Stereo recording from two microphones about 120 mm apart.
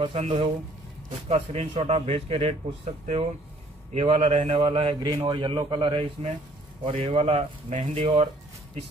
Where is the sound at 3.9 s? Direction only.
60° right (ahead or behind).